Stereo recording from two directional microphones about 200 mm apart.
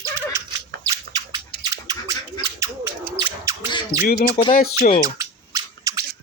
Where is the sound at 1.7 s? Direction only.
15° right (ahead or behind).